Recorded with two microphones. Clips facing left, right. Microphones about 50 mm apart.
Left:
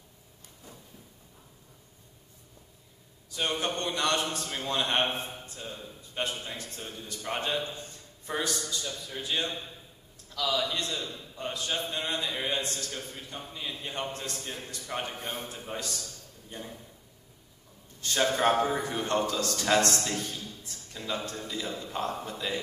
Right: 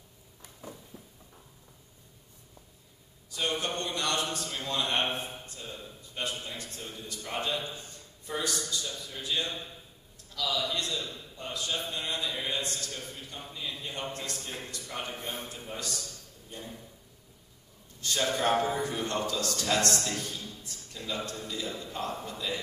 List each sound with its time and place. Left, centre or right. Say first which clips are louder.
3.3 s a man's voice: left 1 dB; left
18.0 s a man's voice: left 3 dB; left